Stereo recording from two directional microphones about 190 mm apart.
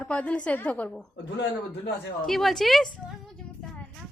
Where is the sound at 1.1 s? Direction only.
65° left (ahead or behind).